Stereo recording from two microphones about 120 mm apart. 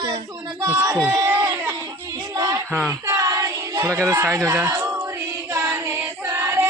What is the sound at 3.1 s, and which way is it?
Child singing, 25° right (ahead or behind).